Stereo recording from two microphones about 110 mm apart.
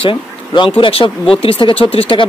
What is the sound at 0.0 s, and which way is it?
Speech, 50° left (ahead or behind).